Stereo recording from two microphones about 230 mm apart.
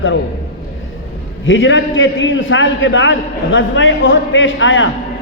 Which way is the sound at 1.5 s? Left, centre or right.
Left.